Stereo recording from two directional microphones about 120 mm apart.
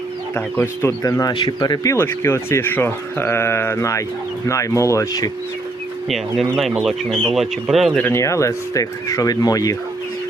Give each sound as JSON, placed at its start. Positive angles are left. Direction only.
{"t": 0.3, "sound": "speech", "side_deg": 20}
{"t": 1.3, "sound": "speech", "side_deg": 40}
{"t": 6.1, "sound": "speech", "side_deg": 0}
{"t": 8.0, "sound": "speech", "side_deg": 25}